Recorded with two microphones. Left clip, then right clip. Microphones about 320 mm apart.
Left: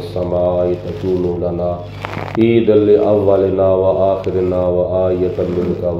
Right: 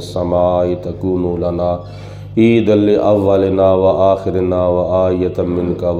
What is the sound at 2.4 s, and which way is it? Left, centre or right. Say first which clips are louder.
Speech: even; right.